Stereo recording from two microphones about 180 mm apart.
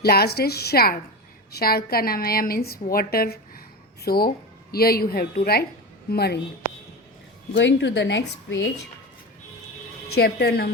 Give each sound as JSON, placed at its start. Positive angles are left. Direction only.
{"t": 0.0, "sound": "a woman's voice", "side_deg": 60}
{"t": 7.5, "sound": "a woman's voice", "side_deg": 80}
{"t": 10.2, "sound": "a woman's voice", "side_deg": 60}